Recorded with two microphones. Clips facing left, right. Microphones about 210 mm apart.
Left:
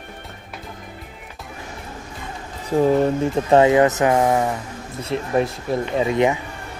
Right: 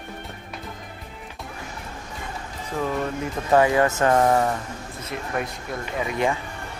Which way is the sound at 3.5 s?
20° left (ahead or behind).